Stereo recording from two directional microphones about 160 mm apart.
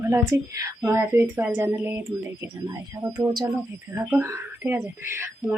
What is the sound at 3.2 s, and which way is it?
A woman's voice, 25° right (ahead or behind).